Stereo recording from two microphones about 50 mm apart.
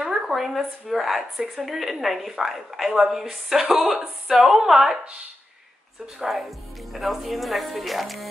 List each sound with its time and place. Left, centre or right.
0.0 s a woman's voice: centre
6.1 s speech: centre